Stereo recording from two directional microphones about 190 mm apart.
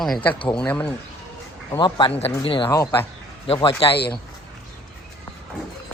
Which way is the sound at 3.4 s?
30° left (ahead or behind).